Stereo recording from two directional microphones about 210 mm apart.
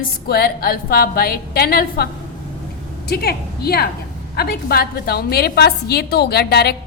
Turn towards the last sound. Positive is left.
turn(degrees=50)  # may be behind; listen again after turning